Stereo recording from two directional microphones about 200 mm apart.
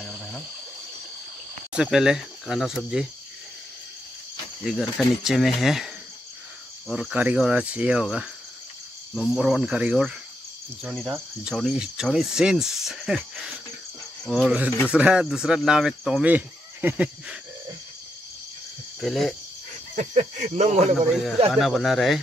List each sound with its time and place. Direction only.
1.7 s speech: 5° right (ahead or behind)
4.6 s speech: centre (ahead or behind)
6.9 s speech: centre (ahead or behind)
18.9 s speech: centre (ahead or behind)
20.0 s speech: 40° right (ahead or behind)
21.1 s speech: centre (ahead or behind)